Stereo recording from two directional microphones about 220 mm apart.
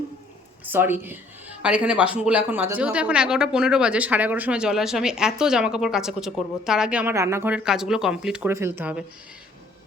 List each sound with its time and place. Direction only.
0.6 s a woman's voice: 10° right (ahead or behind)